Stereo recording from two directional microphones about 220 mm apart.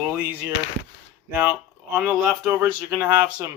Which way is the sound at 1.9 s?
5° right (ahead or behind).